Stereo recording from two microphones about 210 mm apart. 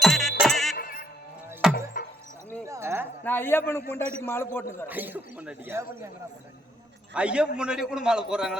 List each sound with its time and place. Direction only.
0.0 s music: centre (ahead or behind)
0.8 s music: 40° left (ahead or behind)
1.6 s a sound: centre (ahead or behind)
2.6 s a sound: 15° right (ahead or behind)
3.2 s a man's voice: 10° left (ahead or behind)
4.9 s speech: 10° right (ahead or behind)
7.1 s a man's voice: 5° right (ahead or behind)